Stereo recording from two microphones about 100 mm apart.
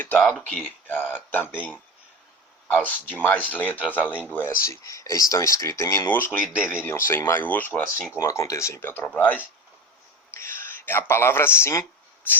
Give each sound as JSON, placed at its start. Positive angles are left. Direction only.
{"t": 0.4, "sound": "speech", "side_deg": 20}
{"t": 2.8, "sound": "speech", "side_deg": 20}
{"t": 6.4, "sound": "speech", "side_deg": -10}
{"t": 6.8, "sound": "speech", "side_deg": 25}
{"t": 8.1, "sound": "speech", "side_deg": 30}